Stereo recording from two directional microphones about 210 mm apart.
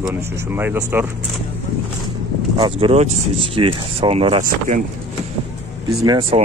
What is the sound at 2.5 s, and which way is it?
Speech, 25° right (ahead or behind).